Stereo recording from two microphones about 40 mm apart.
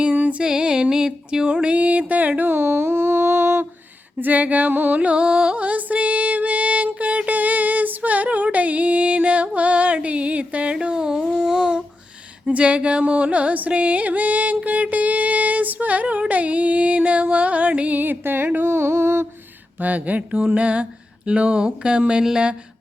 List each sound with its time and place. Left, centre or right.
0.2 s music: right
0.4 s music: centre
1.6 s mantra: right
4.2 s mantra: right
4.9 s mantra: right
5.2 s music: right
5.5 s music: right; by 11.8 s centre
12.5 s music: right
18.2 s a sound: right
19.8 s mantra: right
21.2 s a sound: right